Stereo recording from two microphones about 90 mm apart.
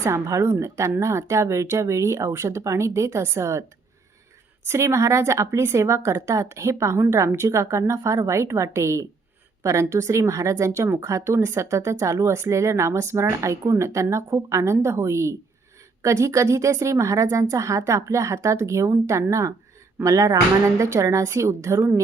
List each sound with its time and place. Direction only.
0.0 s a woman's voice: 35° right (ahead or behind)
4.7 s a woman's voice: 35° right (ahead or behind)